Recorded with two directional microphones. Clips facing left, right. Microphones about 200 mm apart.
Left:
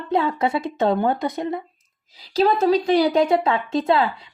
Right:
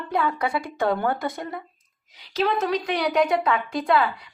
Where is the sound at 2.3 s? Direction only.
35° left (ahead or behind).